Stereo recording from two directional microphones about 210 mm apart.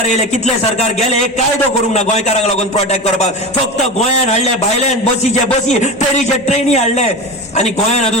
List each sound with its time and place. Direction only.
1.9 s a man's voice: 30° left (ahead or behind)
4.3 s a man's voice: 35° left (ahead or behind)
6.5 s a man's voice: 30° left (ahead or behind)